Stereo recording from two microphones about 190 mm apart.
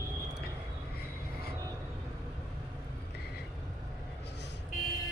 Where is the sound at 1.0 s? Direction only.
55° left (ahead or behind).